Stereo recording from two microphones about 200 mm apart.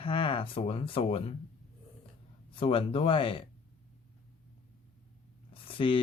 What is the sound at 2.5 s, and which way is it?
Speech, 30° left (ahead or behind).